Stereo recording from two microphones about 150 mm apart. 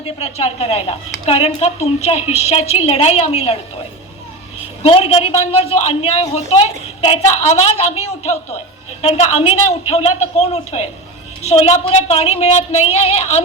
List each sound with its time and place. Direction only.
0.0 s a woman's voice: 45° left (ahead or behind)
4.8 s a man's voice: 40° left (ahead or behind)